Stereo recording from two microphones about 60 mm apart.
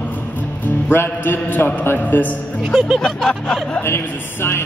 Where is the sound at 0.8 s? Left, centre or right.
Left.